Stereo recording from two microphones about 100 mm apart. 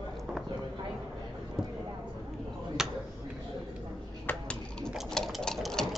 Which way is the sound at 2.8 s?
5° right (ahead or behind).